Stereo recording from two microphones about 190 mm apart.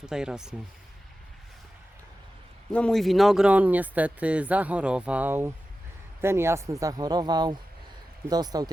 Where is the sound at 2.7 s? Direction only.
5° left (ahead or behind); by 8.7 s 20° right (ahead or behind).